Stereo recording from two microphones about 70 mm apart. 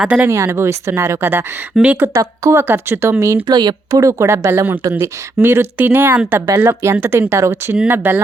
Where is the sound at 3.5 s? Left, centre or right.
Right.